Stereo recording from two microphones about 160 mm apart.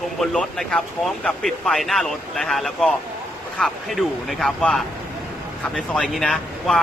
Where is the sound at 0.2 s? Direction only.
Centre (ahead or behind).